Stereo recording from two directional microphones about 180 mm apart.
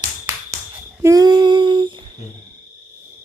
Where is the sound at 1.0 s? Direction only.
20° right (ahead or behind).